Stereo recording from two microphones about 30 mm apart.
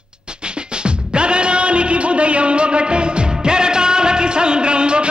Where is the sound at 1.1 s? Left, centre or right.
Right.